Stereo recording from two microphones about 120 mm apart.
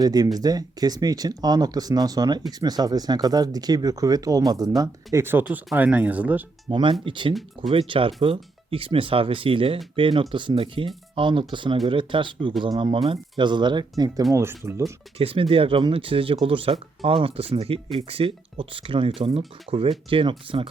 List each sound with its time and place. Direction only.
0.0 s speech: 35° right (ahead or behind)
4.8 s speech: 20° right (ahead or behind)
6.7 s speech: 45° right (ahead or behind); by 14.9 s 25° right (ahead or behind)
15.2 s speech: 50° right (ahead or behind)